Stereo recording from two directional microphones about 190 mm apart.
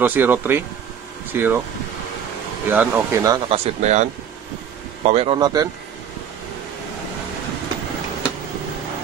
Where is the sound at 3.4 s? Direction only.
35° right (ahead or behind).